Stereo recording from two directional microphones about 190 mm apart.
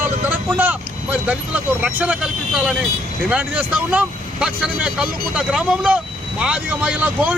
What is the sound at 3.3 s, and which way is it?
Speech, 5° right (ahead or behind).